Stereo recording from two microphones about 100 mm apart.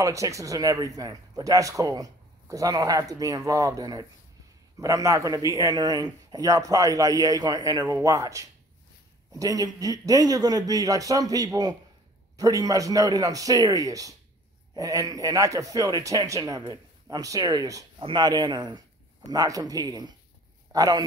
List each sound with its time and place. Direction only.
0.0 s speech: 35° right (ahead or behind)
17.9 s speech: 50° right (ahead or behind)